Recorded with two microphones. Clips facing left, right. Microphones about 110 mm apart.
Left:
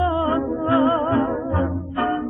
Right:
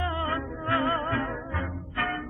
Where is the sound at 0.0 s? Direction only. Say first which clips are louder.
Left 10 dB; 30° left (ahead or behind).